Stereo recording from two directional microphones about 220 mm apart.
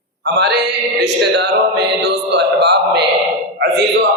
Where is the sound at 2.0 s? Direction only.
50° right (ahead or behind).